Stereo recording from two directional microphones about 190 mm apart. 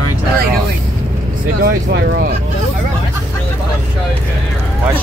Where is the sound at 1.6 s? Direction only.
55° right (ahead or behind).